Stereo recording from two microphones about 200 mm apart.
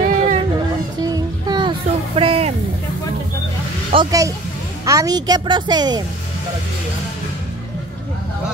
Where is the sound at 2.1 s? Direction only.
30° right (ahead or behind).